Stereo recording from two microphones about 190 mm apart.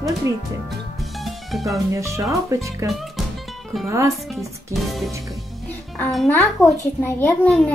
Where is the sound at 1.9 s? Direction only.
15° right (ahead or behind).